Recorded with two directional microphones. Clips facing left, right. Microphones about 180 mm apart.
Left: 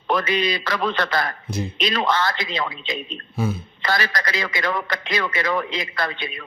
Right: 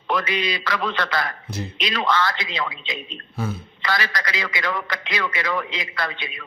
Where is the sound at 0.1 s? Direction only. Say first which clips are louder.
Left 3 dB; 45° left (ahead or behind).